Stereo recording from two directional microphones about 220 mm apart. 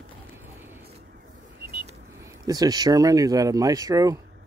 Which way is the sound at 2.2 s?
15° right (ahead or behind).